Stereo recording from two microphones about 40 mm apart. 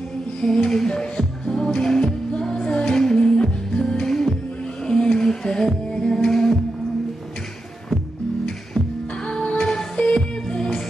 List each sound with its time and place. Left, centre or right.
0.7 s music: centre
8.5 s music: centre